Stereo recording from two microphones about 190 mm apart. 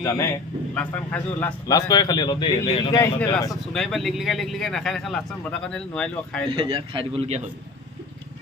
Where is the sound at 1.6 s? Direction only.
20° left (ahead or behind).